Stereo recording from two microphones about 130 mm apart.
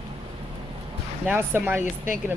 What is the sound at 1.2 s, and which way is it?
Speech, 15° right (ahead or behind).